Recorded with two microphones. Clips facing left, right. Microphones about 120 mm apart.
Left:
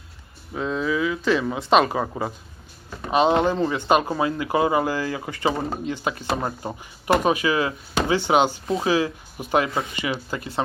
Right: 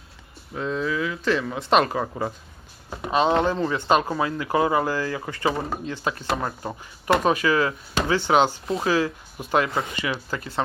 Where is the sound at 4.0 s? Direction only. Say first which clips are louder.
Left 2 dB; 20° left (ahead or behind).